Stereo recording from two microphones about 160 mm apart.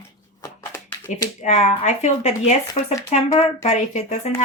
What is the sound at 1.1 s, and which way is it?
Speech, 45° left (ahead or behind).